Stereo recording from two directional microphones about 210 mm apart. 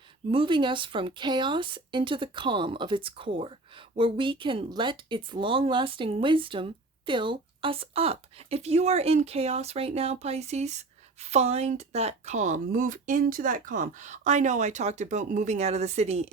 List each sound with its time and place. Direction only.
0.3 s speech: 25° right (ahead or behind)